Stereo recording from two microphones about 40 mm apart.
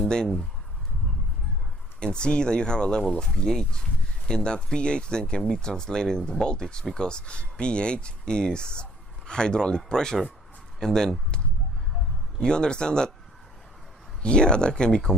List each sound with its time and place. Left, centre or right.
2.0 s speech: left
12.4 s speech: left
14.2 s speech: left